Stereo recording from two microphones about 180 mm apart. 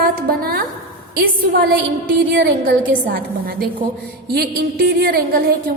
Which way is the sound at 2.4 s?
55° right (ahead or behind).